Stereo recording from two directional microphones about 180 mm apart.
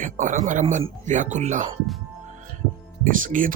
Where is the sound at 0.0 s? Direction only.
45° right (ahead or behind).